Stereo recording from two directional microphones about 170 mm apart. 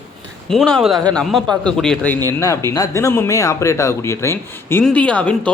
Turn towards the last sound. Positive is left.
turn(degrees=5)  # may be behind; listen again after turning